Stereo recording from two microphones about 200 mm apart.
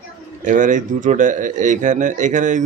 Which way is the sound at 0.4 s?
40° right (ahead or behind).